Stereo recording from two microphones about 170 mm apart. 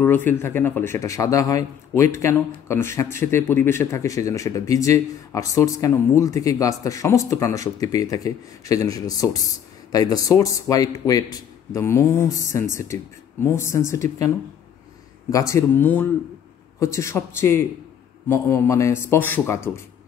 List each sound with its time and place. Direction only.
0.0 s speech: 10° left (ahead or behind)
15.3 s speech: 15° left (ahead or behind)